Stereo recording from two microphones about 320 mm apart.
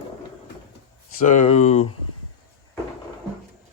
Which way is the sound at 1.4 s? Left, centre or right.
Left.